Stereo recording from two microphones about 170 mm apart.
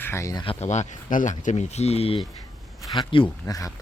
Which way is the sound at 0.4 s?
40° left (ahead or behind).